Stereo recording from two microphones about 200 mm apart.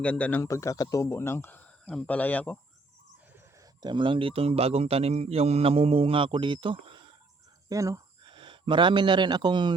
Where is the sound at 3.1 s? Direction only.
10° right (ahead or behind).